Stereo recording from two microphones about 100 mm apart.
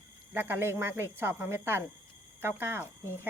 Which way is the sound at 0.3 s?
20° right (ahead or behind).